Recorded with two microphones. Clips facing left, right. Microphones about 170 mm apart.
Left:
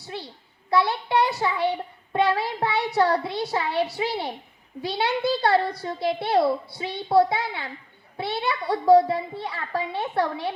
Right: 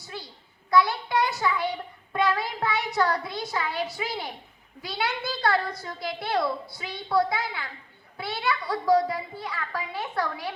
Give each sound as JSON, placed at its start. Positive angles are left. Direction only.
{"t": 0.0, "sound": "a sound", "side_deg": 30}
{"t": 0.7, "sound": "child singing", "side_deg": 30}
{"t": 3.9, "sound": "a child's voice", "side_deg": 30}